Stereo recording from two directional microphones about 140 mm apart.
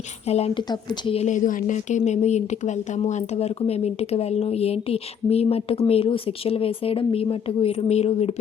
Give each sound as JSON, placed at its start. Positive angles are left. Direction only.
{"t": 0.3, "sound": "a woman's voice", "side_deg": 50}
{"t": 1.3, "sound": "a woman's voice", "side_deg": 70}